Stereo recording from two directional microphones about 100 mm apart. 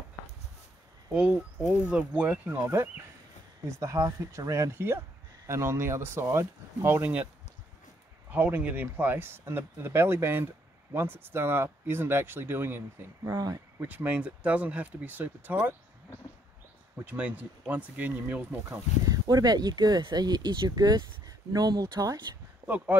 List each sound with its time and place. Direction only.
1.1 s speech: 10° right (ahead or behind)
2.6 s speech: 25° right (ahead or behind)
8.3 s speech: 15° right (ahead or behind)
17.0 s speech: 15° right (ahead or behind)
18.7 s speech: 40° right (ahead or behind)
22.6 s a sound: 40° right (ahead or behind)